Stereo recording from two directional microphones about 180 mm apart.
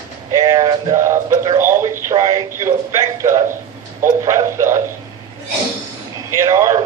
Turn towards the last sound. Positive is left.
turn(degrees=-20)  # may be behind; listen again after turning